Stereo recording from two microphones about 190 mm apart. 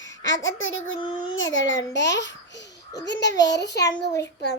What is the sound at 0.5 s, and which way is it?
A child's voice, 90° left.